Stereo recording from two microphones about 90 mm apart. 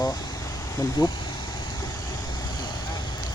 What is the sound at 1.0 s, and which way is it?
Speech, 75° left (ahead or behind).